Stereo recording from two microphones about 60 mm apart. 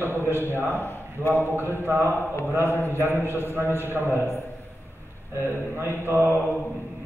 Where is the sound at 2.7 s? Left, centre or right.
Left.